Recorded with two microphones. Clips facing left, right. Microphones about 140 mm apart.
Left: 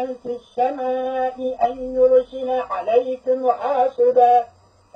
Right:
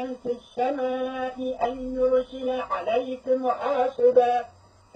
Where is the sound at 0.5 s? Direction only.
45° left (ahead or behind).